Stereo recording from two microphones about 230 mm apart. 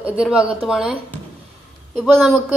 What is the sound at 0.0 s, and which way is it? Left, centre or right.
Speech, centre.